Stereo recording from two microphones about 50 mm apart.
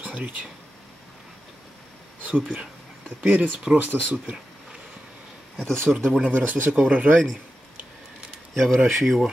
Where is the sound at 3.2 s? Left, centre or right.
Right.